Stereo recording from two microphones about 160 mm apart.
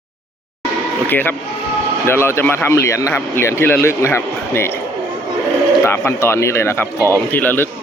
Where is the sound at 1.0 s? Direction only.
10° left (ahead or behind).